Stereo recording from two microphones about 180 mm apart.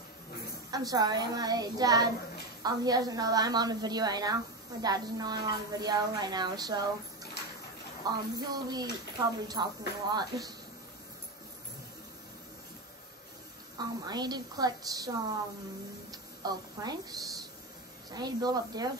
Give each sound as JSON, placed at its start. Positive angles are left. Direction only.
{"t": 0.7, "sound": "speech", "side_deg": -20}
{"t": 8.0, "sound": "speech", "side_deg": -20}
{"t": 13.7, "sound": "speech", "side_deg": -25}
{"t": 18.1, "sound": "speech", "side_deg": -20}